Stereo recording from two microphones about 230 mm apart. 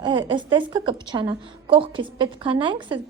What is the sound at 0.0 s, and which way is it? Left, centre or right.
A woman's voice, right.